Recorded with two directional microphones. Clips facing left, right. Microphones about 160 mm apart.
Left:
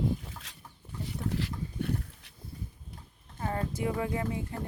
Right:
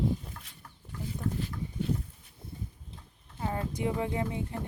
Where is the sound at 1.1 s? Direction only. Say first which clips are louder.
Left 1 dB; 85° left.